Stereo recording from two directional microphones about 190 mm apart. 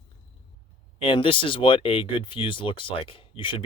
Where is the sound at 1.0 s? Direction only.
30° left (ahead or behind).